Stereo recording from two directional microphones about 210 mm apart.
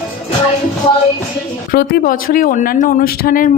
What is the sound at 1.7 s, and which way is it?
Speech, 45° left (ahead or behind).